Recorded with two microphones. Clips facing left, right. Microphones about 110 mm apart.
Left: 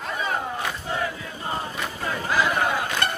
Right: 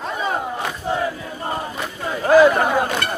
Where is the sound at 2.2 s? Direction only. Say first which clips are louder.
Right 11 dB; 45° right (ahead or behind).